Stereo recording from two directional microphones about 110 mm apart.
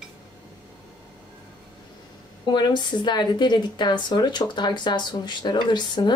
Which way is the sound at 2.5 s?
40° left (ahead or behind).